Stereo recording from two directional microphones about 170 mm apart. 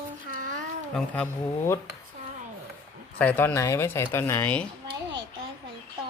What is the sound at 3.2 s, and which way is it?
Speech, 10° left (ahead or behind).